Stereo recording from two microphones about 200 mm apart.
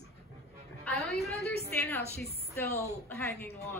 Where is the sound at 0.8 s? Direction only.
Centre (ahead or behind).